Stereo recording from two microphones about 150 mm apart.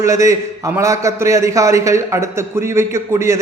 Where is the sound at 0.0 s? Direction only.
20° right (ahead or behind).